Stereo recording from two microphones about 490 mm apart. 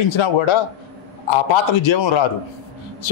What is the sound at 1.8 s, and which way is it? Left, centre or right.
Speech, left.